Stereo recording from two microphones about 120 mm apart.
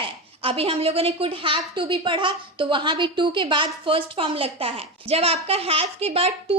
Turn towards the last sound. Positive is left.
turn(degrees=-60)  # may be behind; listen again after turning